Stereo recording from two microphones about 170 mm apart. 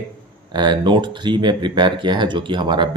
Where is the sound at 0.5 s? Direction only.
25° right (ahead or behind).